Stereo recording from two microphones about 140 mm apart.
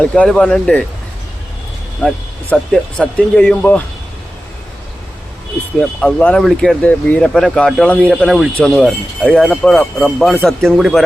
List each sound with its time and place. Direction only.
0.0 s speech: 5° left (ahead or behind)
2.0 s speech: 5° left (ahead or behind)
5.8 s speech: 10° left (ahead or behind)